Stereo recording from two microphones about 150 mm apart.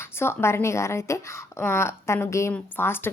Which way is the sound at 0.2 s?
15° left (ahead or behind).